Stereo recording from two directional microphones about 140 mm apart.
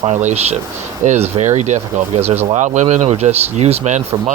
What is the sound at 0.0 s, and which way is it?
Speech, 50° right (ahead or behind).